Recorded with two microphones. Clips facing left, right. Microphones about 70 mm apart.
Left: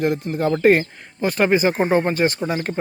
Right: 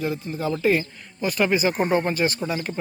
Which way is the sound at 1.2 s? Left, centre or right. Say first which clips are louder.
Left 4 dB; left.